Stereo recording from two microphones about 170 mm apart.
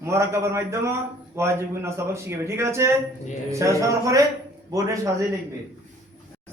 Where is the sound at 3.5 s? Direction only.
15° right (ahead or behind).